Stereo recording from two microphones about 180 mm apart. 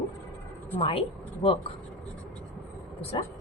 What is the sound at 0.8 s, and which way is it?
Speech, 30° left (ahead or behind).